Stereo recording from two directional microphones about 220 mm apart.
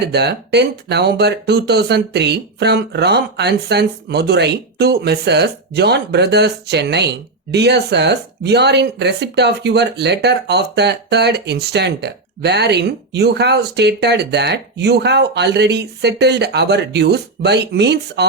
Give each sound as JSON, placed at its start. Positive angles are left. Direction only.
{"t": 0.0, "sound": "speech", "side_deg": -50}